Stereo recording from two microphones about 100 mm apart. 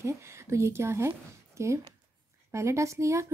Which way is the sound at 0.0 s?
30° right (ahead or behind).